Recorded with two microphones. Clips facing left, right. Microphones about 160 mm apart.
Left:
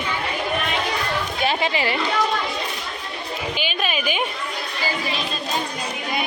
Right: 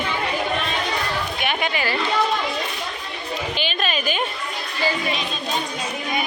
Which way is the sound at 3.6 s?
10° left (ahead or behind).